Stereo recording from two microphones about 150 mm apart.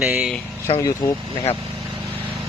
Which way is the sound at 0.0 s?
5° right (ahead or behind).